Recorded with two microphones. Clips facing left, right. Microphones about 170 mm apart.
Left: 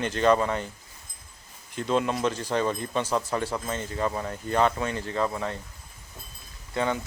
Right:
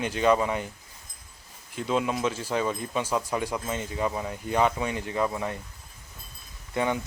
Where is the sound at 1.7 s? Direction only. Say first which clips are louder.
Left 1 dB; 5° right (ahead or behind).